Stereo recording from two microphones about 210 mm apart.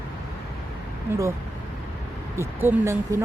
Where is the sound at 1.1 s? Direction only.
10° right (ahead or behind).